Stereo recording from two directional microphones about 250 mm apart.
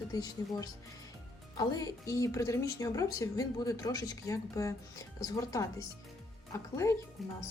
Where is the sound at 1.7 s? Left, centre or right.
Centre.